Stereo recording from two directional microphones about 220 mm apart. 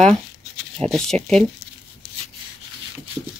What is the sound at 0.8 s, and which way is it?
Speech, centre (ahead or behind).